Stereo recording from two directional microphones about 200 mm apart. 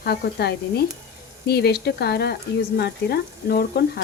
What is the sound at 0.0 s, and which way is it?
Speech, 55° left (ahead or behind).